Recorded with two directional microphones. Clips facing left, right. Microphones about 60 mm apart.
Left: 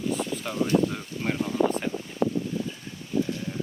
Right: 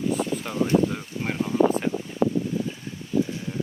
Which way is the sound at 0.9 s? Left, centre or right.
Centre.